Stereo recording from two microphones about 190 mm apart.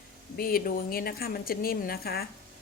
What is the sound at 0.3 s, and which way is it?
A woman's voice, 50° left (ahead or behind).